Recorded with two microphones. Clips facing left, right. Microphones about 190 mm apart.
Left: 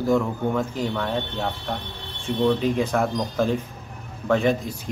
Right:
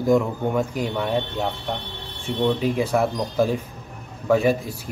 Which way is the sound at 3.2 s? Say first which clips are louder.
Right 1 dB; 15° right (ahead or behind).